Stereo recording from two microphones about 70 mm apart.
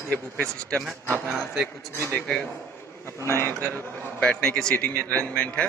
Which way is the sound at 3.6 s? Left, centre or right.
Left.